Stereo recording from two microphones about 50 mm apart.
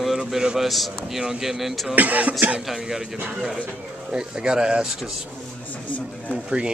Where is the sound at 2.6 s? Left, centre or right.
Centre.